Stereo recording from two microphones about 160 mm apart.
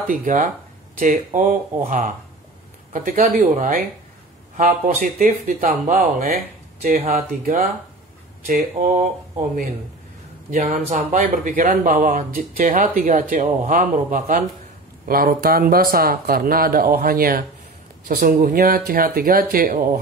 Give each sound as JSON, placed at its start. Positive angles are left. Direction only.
{"t": 0.1, "sound": "speech", "side_deg": -55}
{"t": 10.5, "sound": "speech", "side_deg": -55}
{"t": 15.0, "sound": "speech", "side_deg": -65}